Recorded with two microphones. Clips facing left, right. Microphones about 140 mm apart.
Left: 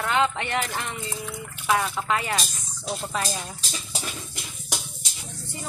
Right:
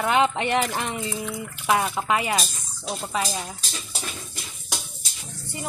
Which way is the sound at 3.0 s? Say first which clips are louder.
Right 4 dB; 5° right (ahead or behind).